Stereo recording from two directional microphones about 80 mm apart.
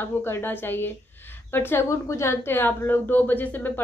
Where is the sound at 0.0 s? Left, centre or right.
Left.